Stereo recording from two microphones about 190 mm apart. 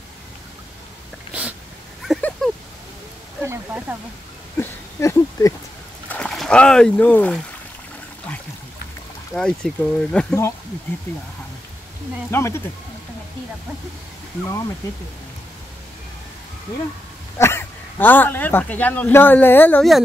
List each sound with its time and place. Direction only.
2.1 s a sound: centre (ahead or behind)
4.6 s a sound: 15° left (ahead or behind)
6.0 s speech: 5° left (ahead or behind)
9.3 s speech: 5° left (ahead or behind)
12.3 s speech: 15° left (ahead or behind)
17.4 s speech: 10° left (ahead or behind)